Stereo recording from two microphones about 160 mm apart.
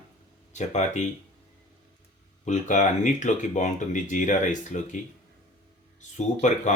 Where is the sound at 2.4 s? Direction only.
50° left (ahead or behind).